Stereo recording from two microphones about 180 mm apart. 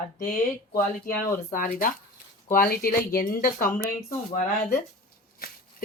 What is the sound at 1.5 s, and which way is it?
Speech, 50° left (ahead or behind).